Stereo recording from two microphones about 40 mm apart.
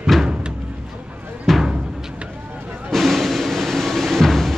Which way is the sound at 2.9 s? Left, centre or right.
Centre.